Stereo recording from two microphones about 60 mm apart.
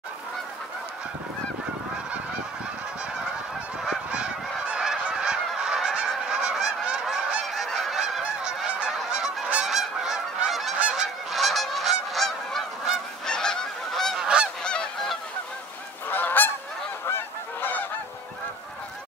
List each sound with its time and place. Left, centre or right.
4.1 s goose: centre
7.4 s goose: centre
8.2 s goose: centre
9.1 s honk: centre
9.6 s goose: centre
10.8 s goose: centre
11.2 s goose: centre
14.1 s goose: centre
14.6 s goose: centre
16.1 s goose: left